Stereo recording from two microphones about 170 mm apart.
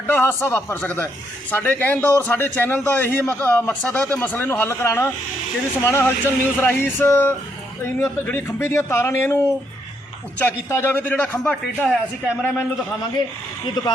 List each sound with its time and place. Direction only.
0.1 s speech: 10° left (ahead or behind)
10.4 s speech: 15° left (ahead or behind)
13.8 s speech: 25° left (ahead or behind)